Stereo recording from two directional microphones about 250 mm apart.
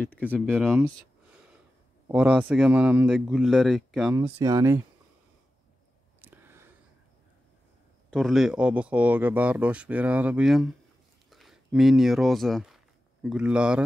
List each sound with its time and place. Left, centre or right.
0.0 s speech: centre
2.0 s speech: centre
4.1 s speech: centre
6.2 s a sound: centre
8.1 s speech: centre